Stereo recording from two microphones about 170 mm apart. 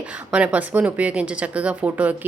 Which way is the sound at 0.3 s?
5° right (ahead or behind).